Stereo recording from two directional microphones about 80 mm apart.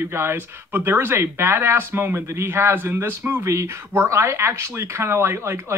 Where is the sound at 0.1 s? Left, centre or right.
Right.